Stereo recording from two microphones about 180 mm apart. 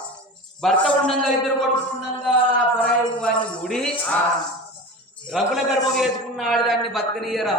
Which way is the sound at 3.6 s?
5° left (ahead or behind).